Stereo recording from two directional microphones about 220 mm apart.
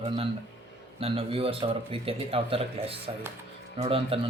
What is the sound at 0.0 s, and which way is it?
Speech, 25° right (ahead or behind).